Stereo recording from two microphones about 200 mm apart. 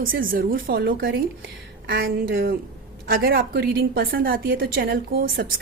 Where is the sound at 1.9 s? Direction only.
50° right (ahead or behind).